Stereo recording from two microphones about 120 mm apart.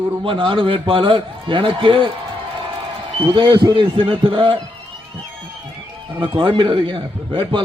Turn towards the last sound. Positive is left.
turn(degrees=-45)  # may be behind; listen again after turning